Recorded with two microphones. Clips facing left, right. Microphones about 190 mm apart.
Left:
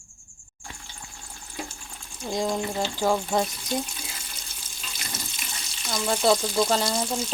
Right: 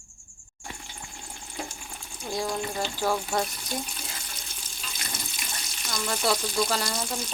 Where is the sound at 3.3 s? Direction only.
20° left (ahead or behind).